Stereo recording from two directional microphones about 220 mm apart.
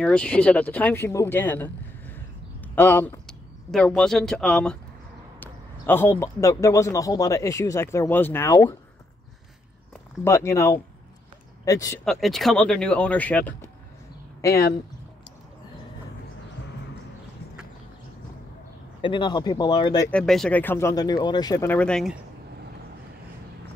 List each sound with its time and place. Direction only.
0.0 s a man's voice: 5° left (ahead or behind)
10.2 s a man's voice: 15° left (ahead or behind)
12.0 s speech: centre (ahead or behind)
18.9 s speech: 20° left (ahead or behind)
20.1 s a man's voice: 5° left (ahead or behind)